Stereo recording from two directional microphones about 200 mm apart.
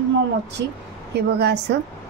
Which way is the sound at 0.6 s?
55° right (ahead or behind).